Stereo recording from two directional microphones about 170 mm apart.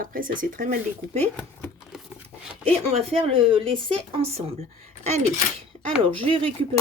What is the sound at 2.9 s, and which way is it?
A woman's voice, 35° right (ahead or behind).